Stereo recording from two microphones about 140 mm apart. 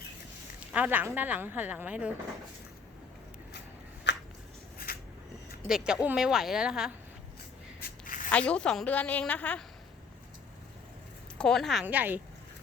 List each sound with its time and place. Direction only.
0.7 s a woman's voice: 10° right (ahead or behind)
4.8 s a sound: 90° left
5.6 s a woman's voice: 5° right (ahead or behind)
7.8 s a sound: 80° left
8.3 s a woman's voice: 10° left (ahead or behind)
11.3 s a woman's voice: 5° left (ahead or behind)
11.9 s a woman's voice: 10° right (ahead or behind)